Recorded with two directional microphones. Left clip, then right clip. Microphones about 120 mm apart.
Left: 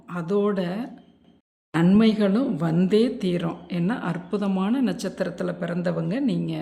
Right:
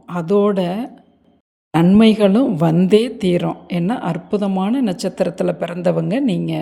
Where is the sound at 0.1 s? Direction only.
40° right (ahead or behind).